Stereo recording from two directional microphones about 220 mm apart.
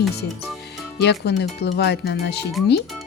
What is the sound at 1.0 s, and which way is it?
A child's voice, 50° left (ahead or behind).